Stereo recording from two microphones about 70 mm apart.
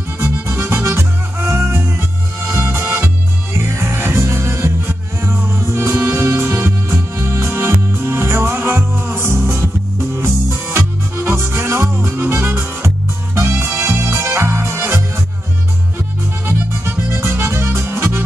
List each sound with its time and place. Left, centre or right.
0.2 s music: right
3.5 s music: right
16.4 s music: right